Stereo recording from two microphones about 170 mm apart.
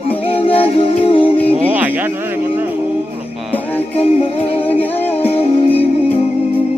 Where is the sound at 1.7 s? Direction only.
10° right (ahead or behind).